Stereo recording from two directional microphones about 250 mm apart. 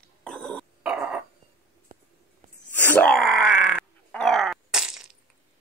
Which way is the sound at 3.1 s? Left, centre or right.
Left.